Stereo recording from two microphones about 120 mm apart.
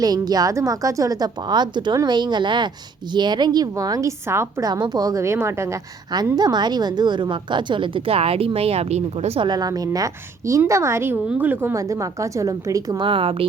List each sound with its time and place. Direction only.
0.0 s a woman's voice: 30° right (ahead or behind)
4.7 s a woman's voice: 35° right (ahead or behind); by 9.4 s 65° right (ahead or behind)
9.4 s a woman's voice: 35° right (ahead or behind)
13.0 s a woman's voice: 45° right (ahead or behind)